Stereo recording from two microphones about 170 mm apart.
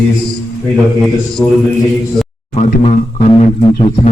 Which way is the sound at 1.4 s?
15° left (ahead or behind).